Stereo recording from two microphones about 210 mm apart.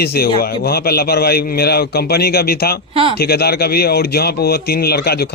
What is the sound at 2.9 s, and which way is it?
Speech, 25° right (ahead or behind).